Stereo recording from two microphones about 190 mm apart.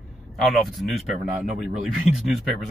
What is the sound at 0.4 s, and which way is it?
Speech, centre (ahead or behind).